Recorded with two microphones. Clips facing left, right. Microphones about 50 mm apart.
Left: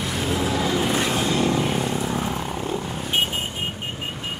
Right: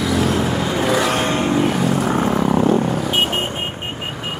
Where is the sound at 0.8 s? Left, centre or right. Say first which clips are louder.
Right 5 dB; right.